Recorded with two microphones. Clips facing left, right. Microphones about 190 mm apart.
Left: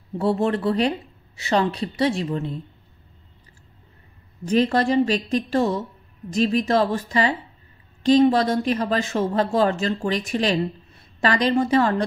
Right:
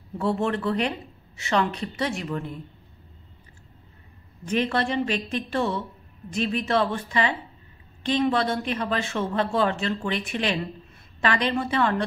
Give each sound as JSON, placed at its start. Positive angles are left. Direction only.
{"t": 0.2, "sound": "speech", "side_deg": 35}
{"t": 4.5, "sound": "speech", "side_deg": 35}